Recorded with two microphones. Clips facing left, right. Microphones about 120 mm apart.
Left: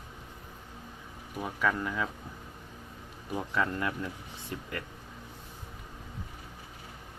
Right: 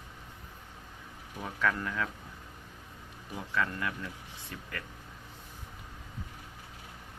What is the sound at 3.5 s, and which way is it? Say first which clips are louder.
Speech: left 1 dB; 25° left (ahead or behind).